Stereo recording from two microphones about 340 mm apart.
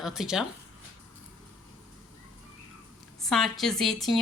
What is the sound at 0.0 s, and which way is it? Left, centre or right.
Speech, centre.